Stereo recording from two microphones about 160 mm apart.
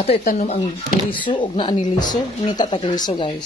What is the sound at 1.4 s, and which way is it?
Speech, 30° left (ahead or behind).